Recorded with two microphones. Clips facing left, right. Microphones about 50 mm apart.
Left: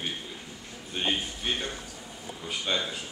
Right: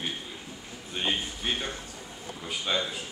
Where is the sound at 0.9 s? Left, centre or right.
Centre.